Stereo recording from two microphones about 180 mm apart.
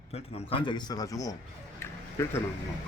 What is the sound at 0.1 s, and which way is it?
A man's voice, 35° left (ahead or behind).